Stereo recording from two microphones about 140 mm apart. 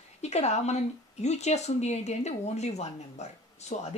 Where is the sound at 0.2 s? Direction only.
50° left (ahead or behind).